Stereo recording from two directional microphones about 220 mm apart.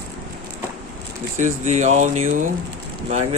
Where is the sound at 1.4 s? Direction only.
35° right (ahead or behind).